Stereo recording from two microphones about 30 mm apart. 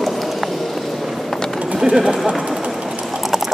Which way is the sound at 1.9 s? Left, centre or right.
Right.